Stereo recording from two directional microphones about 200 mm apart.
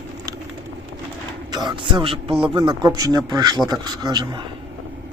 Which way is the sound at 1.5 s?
20° right (ahead or behind).